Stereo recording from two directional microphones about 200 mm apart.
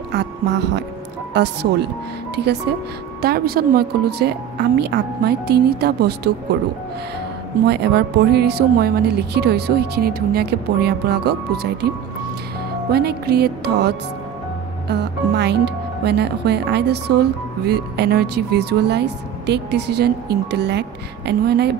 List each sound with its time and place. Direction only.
0.1 s speech: 55° right (ahead or behind)
7.6 s speech: 55° right (ahead or behind)
12.9 s music: 50° right (ahead or behind)
14.9 s speech: 60° right (ahead or behind)